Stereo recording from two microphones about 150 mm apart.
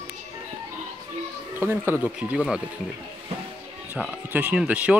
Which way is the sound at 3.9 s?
10° right (ahead or behind).